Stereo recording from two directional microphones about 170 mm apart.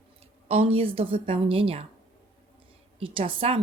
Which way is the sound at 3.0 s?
30° right (ahead or behind).